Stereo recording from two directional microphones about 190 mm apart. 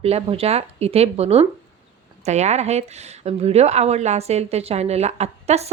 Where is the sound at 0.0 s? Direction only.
35° right (ahead or behind).